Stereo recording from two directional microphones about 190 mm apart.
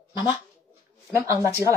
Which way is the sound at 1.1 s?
15° right (ahead or behind).